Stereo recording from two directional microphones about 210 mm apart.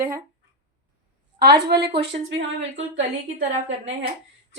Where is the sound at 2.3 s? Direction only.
60° right (ahead or behind).